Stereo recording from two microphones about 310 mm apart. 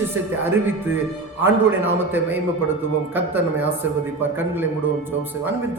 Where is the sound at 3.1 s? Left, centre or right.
Centre.